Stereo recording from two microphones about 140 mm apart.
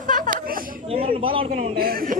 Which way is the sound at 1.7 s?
90° right.